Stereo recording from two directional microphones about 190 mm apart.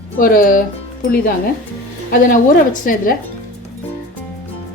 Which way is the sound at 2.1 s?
45° left (ahead or behind).